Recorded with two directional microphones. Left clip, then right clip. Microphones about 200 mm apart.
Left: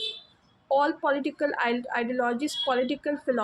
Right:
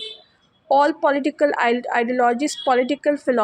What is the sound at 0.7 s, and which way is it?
A woman's voice, 25° right (ahead or behind).